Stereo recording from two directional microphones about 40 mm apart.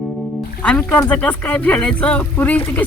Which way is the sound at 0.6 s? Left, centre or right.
Left.